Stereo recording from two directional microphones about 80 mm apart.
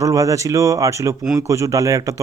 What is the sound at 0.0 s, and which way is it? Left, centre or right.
Speech, right.